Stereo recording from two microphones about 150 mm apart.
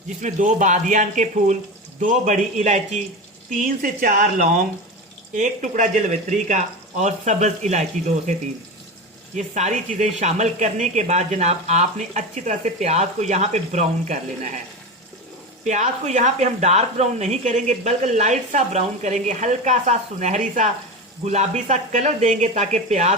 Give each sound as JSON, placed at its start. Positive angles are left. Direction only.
{"t": 0.2, "sound": "a man's voice", "side_deg": -55}
{"t": 3.5, "sound": "a man's voice", "side_deg": -65}
{"t": 9.3, "sound": "speech", "side_deg": -50}
{"t": 15.6, "sound": "speech", "side_deg": -50}